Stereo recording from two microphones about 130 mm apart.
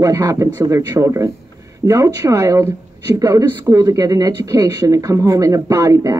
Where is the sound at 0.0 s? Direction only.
25° right (ahead or behind).